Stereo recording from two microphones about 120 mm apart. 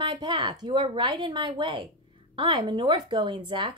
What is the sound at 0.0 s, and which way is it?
Speech, 45° right (ahead or behind).